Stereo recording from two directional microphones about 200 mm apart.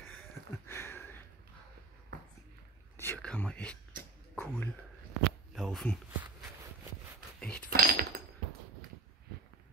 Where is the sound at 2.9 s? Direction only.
10° left (ahead or behind).